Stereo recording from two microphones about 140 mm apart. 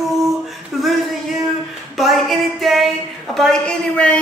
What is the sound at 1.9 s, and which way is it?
Female singing, centre (ahead or behind).